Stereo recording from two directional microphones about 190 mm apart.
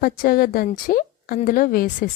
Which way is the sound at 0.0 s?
50° left (ahead or behind).